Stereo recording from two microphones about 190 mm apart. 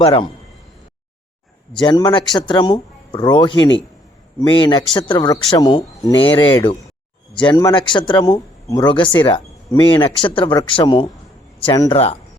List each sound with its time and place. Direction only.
0.0 s speech: 25° left (ahead or behind)
1.7 s speech: 25° left (ahead or behind)